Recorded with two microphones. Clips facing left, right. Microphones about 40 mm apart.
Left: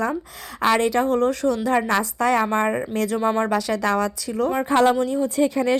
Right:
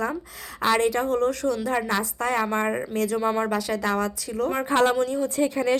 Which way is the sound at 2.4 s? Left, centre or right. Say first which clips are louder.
Left 3 dB; left.